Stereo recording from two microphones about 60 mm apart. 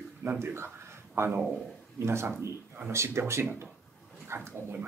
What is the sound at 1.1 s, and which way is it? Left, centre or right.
Speech, right.